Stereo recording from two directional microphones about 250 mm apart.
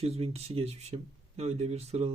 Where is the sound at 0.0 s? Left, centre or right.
Right.